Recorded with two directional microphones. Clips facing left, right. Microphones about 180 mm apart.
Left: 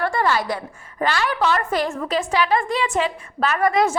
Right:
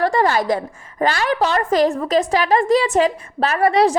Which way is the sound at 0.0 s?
40° right (ahead or behind).